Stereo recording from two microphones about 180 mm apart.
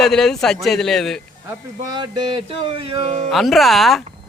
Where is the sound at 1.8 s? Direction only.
20° right (ahead or behind).